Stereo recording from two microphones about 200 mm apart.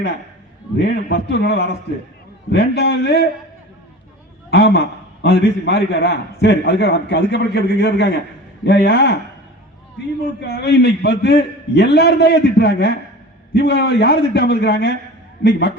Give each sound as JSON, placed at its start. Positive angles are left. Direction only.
{"t": 0.8, "sound": "a man's voice", "side_deg": 55}
{"t": 4.5, "sound": "a man's voice", "side_deg": 55}
{"t": 10.2, "sound": "a man's voice", "side_deg": 55}